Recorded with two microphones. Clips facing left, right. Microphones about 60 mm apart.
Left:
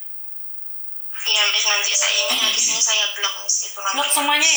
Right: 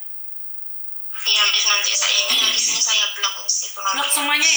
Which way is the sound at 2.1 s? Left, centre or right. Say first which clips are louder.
Right 1 dB; right.